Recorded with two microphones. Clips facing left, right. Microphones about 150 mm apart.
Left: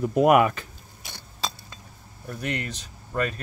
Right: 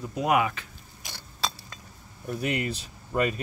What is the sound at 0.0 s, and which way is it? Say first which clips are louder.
Speech: left 7 dB; 55° left (ahead or behind).